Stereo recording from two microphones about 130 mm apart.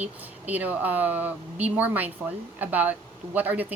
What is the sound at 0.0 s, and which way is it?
Speech, 10° right (ahead or behind).